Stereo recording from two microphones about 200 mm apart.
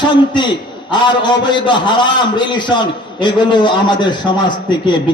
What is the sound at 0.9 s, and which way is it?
A man's voice, 25° left (ahead or behind).